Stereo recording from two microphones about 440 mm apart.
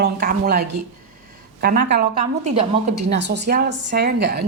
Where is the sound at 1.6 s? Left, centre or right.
Centre.